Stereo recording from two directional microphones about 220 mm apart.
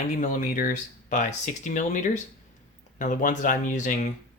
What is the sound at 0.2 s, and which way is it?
Speech, 35° left (ahead or behind).